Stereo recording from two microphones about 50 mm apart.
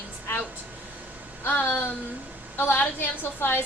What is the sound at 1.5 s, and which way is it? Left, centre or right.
Speech, left.